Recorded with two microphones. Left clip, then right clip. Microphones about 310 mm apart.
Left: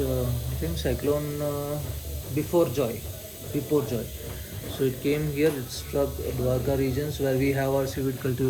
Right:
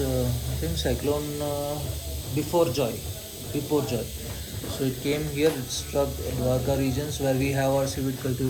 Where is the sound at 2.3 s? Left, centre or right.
Centre.